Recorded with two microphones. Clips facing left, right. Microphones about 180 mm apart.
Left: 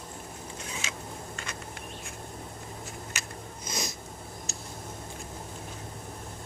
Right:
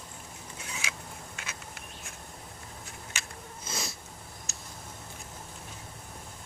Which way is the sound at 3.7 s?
15° left (ahead or behind).